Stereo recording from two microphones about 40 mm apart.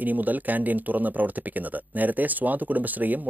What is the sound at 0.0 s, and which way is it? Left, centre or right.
Speech, right.